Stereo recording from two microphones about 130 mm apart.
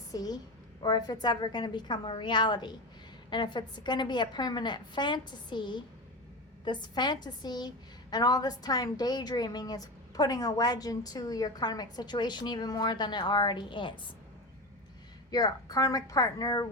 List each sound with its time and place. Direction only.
0.1 s a woman's voice: 30° left (ahead or behind)
15.3 s a woman's voice: 30° left (ahead or behind)